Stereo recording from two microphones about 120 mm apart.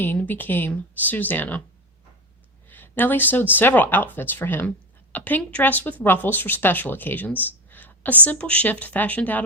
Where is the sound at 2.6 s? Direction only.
15° left (ahead or behind).